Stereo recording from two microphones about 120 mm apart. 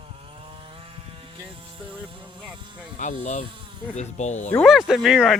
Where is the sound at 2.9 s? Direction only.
85° left.